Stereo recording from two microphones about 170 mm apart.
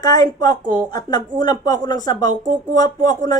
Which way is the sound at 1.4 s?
25° left (ahead or behind).